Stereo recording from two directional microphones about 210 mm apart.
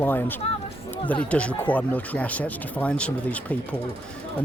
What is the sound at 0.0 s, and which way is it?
Speech, 10° left (ahead or behind).